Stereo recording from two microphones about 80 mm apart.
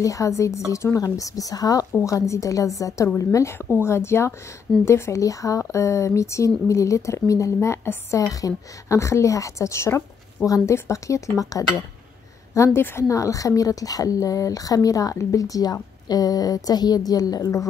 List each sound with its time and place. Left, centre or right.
0.0 s speech: left
8.3 s speech: left